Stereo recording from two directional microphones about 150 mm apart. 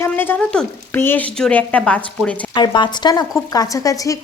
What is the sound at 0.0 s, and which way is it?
Speech, 15° left (ahead or behind).